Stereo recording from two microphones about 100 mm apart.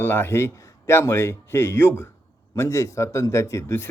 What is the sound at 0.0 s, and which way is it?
Speech, 20° left (ahead or behind).